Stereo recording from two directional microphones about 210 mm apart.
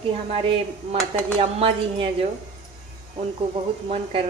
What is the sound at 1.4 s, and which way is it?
Speech, 25° right (ahead or behind).